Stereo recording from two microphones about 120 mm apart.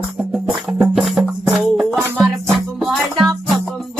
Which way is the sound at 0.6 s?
5° right (ahead or behind).